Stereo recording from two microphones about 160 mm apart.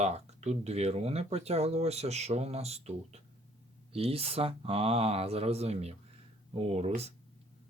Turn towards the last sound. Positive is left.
turn(degrees=-40)  # may be behind; listen again after turning